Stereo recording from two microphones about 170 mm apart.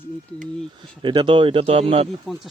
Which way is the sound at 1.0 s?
30° right (ahead or behind).